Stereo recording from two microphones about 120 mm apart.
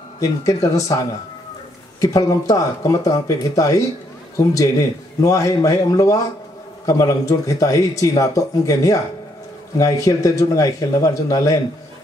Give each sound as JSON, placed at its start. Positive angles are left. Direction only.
{"t": 0.2, "sound": "speech", "side_deg": 25}
{"t": 5.2, "sound": "speech", "side_deg": 25}